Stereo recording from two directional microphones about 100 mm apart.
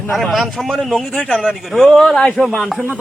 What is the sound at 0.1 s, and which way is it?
A man's voice, centre (ahead or behind).